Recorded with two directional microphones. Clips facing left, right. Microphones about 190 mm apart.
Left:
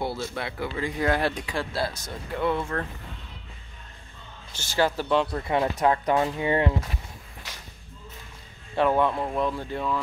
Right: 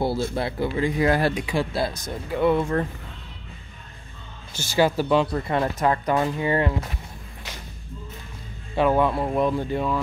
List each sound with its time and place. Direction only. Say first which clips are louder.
0.3 s a man's voice: right 6 dB; 30° right (ahead or behind)
0.7 s speech: right 7 dB; 15° right (ahead or behind)
1.0 s speech: right 1 dB; 5° right (ahead or behind)
4.5 s speech: right 4 dB; 10° right (ahead or behind)
5.5 s speech: left 3 dB; 10° left (ahead or behind)
8.7 s speech: right 2 dB; 5° right (ahead or behind)